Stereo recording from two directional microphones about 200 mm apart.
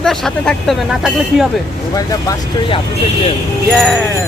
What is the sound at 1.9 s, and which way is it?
Speech, 20° left (ahead or behind).